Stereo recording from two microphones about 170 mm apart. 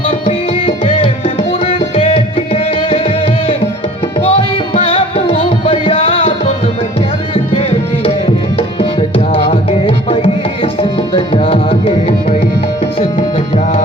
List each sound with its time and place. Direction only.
0.1 s music: 35° left (ahead or behind)
7.5 s tabla: 35° left (ahead or behind)